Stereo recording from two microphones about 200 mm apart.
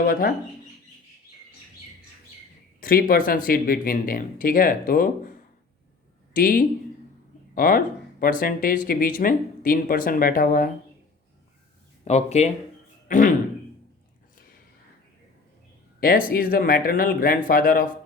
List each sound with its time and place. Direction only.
0.1 s speech: 50° left (ahead or behind)
2.8 s speech: 45° left (ahead or behind)
12.0 s speech: 35° left (ahead or behind)
13.1 s throat clearing: 40° left (ahead or behind)
16.0 s speech: 45° left (ahead or behind)